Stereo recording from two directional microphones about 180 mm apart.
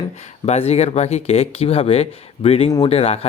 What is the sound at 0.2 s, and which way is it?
Speech, 35° left (ahead or behind).